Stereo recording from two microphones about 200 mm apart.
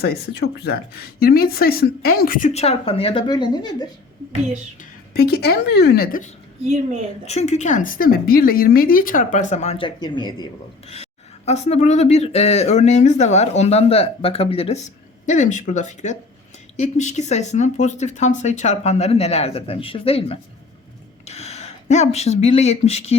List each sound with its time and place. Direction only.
0.0 s speech: 55° left (ahead or behind)
2.5 s speech: 30° left (ahead or behind)
4.8 s speech: 50° left (ahead or behind); by 23.1 s 30° left (ahead or behind)